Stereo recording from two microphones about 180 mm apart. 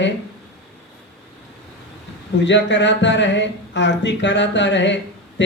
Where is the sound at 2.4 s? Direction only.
85° left.